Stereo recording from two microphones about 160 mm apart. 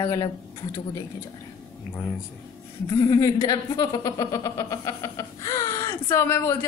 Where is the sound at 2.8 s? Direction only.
30° left (ahead or behind).